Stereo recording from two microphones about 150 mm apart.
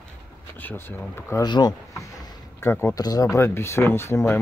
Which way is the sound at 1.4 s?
30° left (ahead or behind).